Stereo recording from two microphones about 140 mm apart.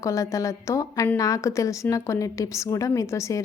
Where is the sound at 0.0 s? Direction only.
20° left (ahead or behind).